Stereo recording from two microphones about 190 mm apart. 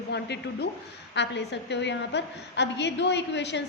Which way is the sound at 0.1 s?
60° left (ahead or behind).